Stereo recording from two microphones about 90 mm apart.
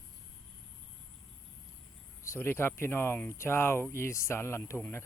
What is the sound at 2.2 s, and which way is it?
Speech, 30° left (ahead or behind).